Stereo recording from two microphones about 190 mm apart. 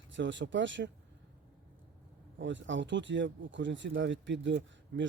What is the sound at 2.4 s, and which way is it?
Speech, 75° right (ahead or behind).